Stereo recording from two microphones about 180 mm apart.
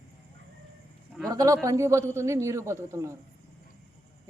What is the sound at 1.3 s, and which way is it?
A man's voice, 20° right (ahead or behind).